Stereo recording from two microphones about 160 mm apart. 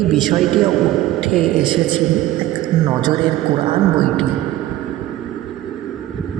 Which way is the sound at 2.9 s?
25° right (ahead or behind).